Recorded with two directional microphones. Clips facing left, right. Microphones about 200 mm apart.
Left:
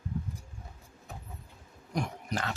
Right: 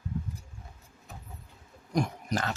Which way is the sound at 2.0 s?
40° right (ahead or behind).